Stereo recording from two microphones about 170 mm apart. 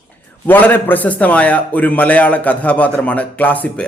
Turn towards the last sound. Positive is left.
turn(degrees=10)  # may be behind; listen again after turning